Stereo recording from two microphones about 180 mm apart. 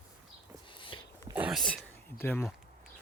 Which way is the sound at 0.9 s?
30° left (ahead or behind).